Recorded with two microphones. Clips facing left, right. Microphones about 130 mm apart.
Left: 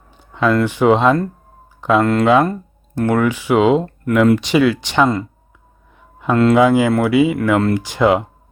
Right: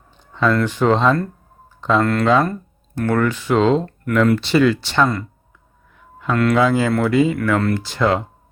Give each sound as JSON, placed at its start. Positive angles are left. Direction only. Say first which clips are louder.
{"t": 0.2, "sound": "speech", "louder": "left 2 dB", "side_deg": 10}